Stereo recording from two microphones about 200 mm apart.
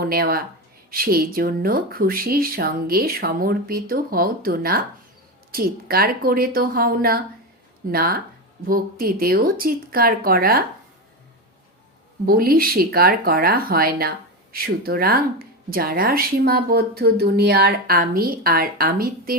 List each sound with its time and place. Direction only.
0.0 s speech: 50° right (ahead or behind)
12.2 s speech: 45° right (ahead or behind)